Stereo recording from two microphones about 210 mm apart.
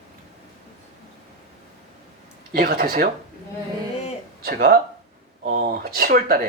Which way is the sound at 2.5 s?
45° right (ahead or behind).